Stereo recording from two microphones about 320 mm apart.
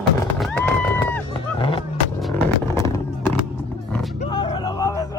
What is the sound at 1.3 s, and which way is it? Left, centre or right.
Vehicle, centre.